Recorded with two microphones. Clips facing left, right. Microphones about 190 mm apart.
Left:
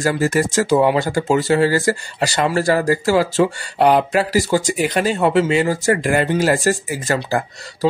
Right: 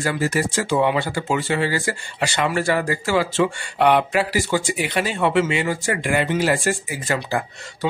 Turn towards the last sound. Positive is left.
turn(degrees=35)  # may be behind; listen again after turning